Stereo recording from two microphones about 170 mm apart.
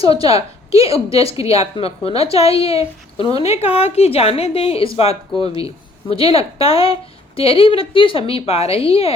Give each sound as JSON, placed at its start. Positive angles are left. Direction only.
{"t": 0.0, "sound": "a woman's voice", "side_deg": 35}